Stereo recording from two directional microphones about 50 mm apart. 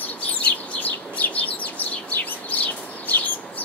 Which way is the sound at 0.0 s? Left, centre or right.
Left.